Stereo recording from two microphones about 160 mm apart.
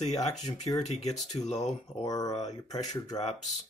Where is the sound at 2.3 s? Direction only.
45° left (ahead or behind).